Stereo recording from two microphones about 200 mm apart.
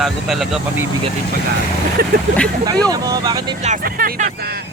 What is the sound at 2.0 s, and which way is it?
Speech, 50° right (ahead or behind).